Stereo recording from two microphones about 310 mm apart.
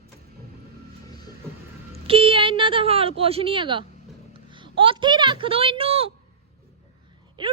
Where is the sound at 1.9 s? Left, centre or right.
Centre.